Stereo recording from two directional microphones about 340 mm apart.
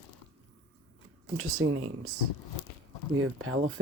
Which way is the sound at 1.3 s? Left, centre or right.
Right.